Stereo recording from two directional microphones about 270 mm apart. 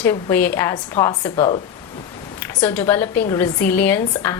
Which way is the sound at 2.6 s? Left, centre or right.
Centre.